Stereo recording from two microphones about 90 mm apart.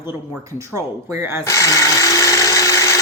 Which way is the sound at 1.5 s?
35° left (ahead or behind).